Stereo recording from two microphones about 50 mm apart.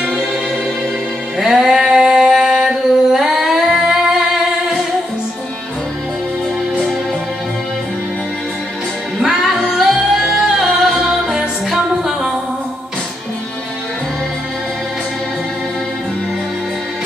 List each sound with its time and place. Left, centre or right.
1.4 s singing: centre
9.2 s music: centre